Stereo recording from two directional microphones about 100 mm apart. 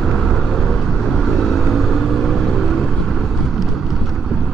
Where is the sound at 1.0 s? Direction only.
5° left (ahead or behind).